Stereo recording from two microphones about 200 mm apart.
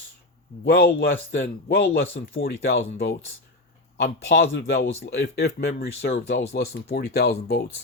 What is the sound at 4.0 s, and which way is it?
Speech, 55° left (ahead or behind).